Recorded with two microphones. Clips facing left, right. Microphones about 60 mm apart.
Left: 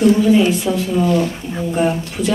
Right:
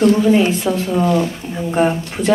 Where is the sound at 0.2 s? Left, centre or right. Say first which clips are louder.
Even; right.